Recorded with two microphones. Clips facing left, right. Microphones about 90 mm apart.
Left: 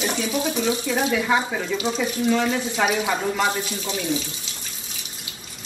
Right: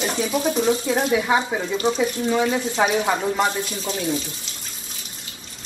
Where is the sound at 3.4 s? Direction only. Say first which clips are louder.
Right 1 dB; centre (ahead or behind).